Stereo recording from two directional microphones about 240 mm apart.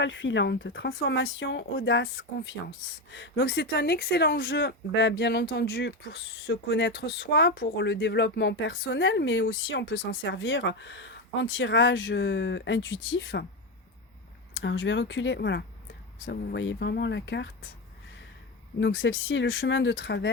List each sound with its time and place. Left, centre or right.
0.0 s speech: left
14.5 s speech: left
18.8 s speech: left